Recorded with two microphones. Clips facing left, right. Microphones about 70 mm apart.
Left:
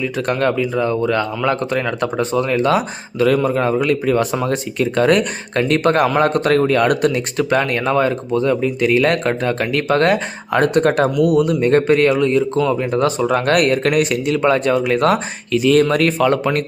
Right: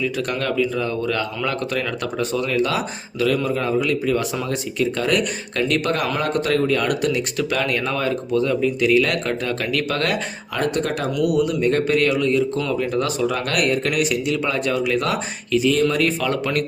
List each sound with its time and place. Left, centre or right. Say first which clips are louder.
0.0 s a man's voice: left 5 dB; left
10.5 s speech: left 8 dB; left
11.2 s a man's voice: left 1 dB; left